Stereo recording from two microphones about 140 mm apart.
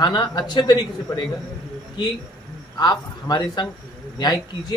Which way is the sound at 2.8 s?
30° left (ahead or behind).